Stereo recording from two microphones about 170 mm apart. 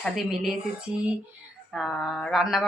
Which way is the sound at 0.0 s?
Centre (ahead or behind).